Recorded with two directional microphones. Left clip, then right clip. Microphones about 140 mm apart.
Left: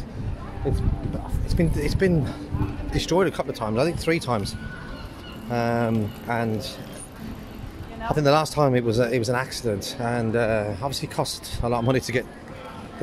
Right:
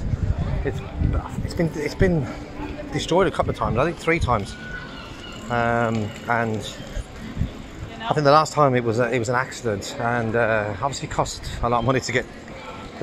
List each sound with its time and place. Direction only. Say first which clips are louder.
1.6 s speech: right 1 dB; 25° left (ahead or behind)
3.8 s speech: right 1 dB; 30° left (ahead or behind)
5.5 s speech: right 3 dB; 30° left (ahead or behind)
8.1 s speech: right 4 dB; 20° left (ahead or behind)